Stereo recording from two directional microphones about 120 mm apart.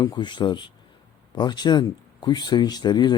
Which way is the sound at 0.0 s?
35° left (ahead or behind).